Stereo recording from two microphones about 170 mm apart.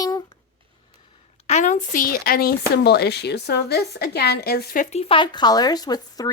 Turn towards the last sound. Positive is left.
turn(degrees=25)  # may be behind; listen again after turning